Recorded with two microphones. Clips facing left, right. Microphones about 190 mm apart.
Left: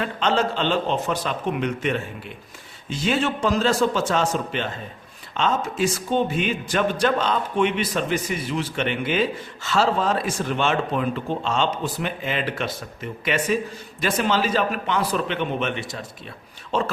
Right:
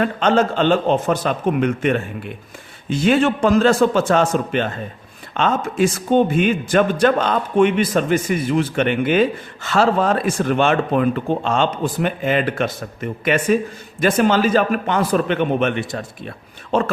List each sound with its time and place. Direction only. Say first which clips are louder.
0.0 s a man's voice: right 6 dB; 50° right (ahead or behind)